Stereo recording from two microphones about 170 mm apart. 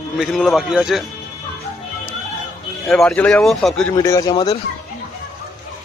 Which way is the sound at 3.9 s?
20° left (ahead or behind).